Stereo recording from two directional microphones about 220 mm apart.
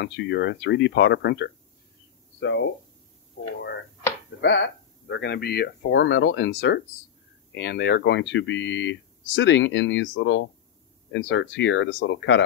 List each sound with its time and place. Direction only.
0.0 s speech: 50° left (ahead or behind)
4.4 s speech: 55° left (ahead or behind)